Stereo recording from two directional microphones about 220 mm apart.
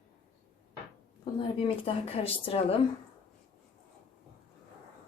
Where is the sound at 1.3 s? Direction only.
25° left (ahead or behind).